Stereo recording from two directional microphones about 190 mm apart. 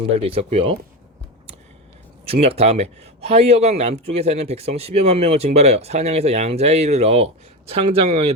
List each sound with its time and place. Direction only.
0.0 s speech: 30° right (ahead or behind)
2.2 s speech: 30° right (ahead or behind)